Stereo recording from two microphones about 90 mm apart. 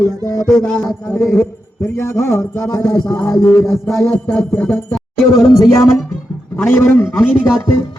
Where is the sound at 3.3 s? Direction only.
35° left (ahead or behind).